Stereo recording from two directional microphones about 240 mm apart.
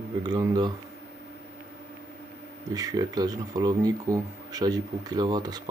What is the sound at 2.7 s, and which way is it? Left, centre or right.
Speech, centre.